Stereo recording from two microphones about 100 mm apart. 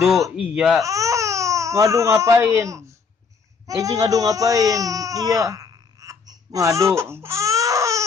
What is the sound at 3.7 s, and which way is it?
Speech, 35° right (ahead or behind).